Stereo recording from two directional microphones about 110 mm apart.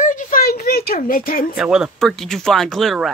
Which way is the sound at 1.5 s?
10° right (ahead or behind).